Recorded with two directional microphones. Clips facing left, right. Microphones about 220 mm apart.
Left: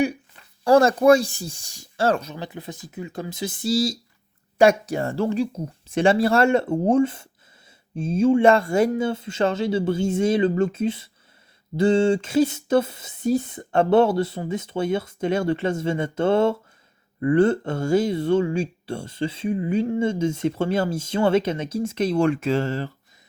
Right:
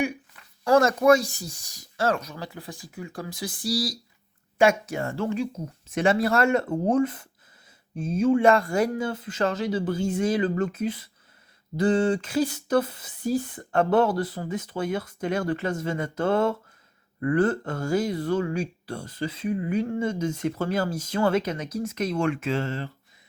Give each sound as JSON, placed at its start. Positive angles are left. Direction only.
{"t": 0.6, "sound": "speech", "side_deg": 30}
{"t": 4.5, "sound": "speech", "side_deg": 35}